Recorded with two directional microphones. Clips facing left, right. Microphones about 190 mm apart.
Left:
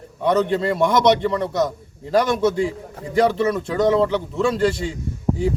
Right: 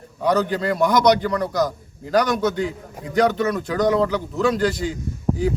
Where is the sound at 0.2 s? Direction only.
25° left (ahead or behind).